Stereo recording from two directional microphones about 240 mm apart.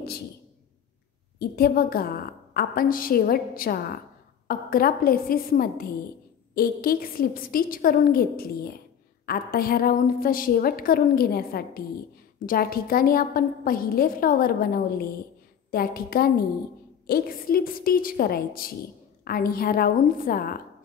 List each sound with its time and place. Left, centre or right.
1.4 s a woman's voice: left